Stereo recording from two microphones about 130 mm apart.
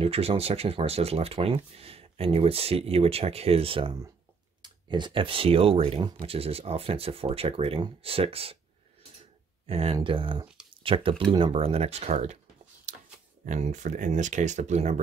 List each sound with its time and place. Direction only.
0.0 s speech: 45° right (ahead or behind)
9.7 s speech: 50° right (ahead or behind)
12.9 s a sound: 70° right (ahead or behind)
13.5 s speech: 70° right (ahead or behind)